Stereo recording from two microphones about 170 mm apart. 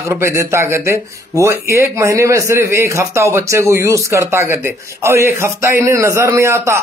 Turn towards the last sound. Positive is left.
turn(degrees=-15)  # may be behind; listen again after turning